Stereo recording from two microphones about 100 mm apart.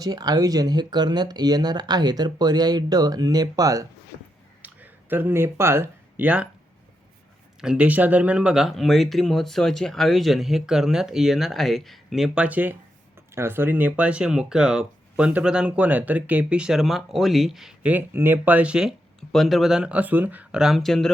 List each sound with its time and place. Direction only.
0.0 s speech: 40° right (ahead or behind)
4.6 s speech: 20° right (ahead or behind)
7.6 s speech: 10° right (ahead or behind)
17.8 s speech: 20° right (ahead or behind)
20.6 s speech: centre (ahead or behind)